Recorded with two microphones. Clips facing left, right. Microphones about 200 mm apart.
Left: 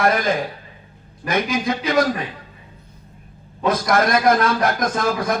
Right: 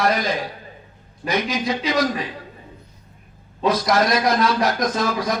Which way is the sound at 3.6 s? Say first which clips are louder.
Even; 50° left (ahead or behind).